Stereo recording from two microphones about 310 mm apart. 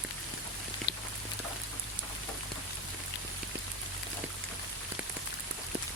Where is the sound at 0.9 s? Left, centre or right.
Left.